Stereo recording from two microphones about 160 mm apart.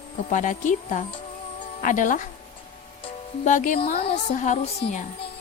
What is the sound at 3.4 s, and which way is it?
Speech, 50° left (ahead or behind).